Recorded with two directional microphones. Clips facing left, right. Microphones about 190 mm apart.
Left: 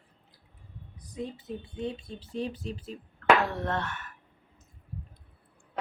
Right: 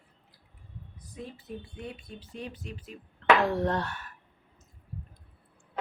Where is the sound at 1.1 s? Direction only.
20° left (ahead or behind).